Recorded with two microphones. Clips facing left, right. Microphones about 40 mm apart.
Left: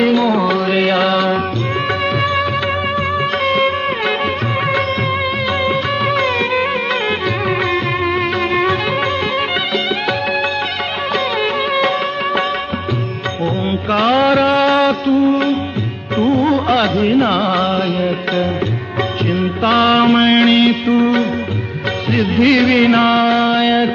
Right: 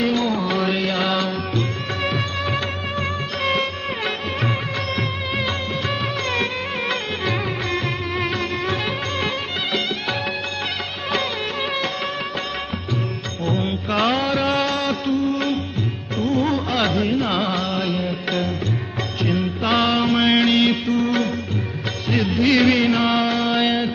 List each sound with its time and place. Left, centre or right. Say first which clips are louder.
0.0 s music: left 7 dB; left
13.4 s music: left 4 dB; centre
14.2 s a sound: left 8 dB; left
15.1 s music: left 7 dB; left
17.0 s carnatic music: left 7 dB; left
17.5 s music: left 8 dB; left
19.3 s music: left 5 dB; centre
19.9 s music: left 6 dB; left
22.3 s music: left 4 dB; left